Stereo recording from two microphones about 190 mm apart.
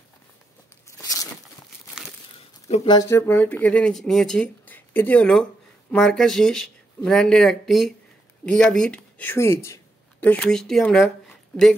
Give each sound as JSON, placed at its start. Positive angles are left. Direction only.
{"t": 0.8, "sound": "a sound", "side_deg": 15}
{"t": 2.7, "sound": "speech", "side_deg": 30}
{"t": 3.0, "sound": "speech", "side_deg": 15}